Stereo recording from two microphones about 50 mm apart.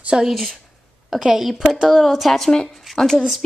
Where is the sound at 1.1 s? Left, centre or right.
Centre.